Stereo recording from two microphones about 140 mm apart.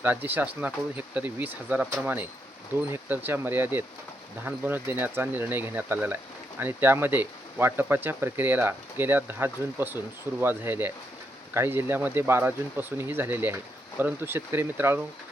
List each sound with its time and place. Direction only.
0.0 s speech: 15° right (ahead or behind)